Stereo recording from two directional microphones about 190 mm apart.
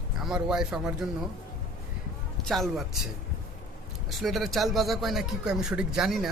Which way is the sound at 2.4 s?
Centre (ahead or behind).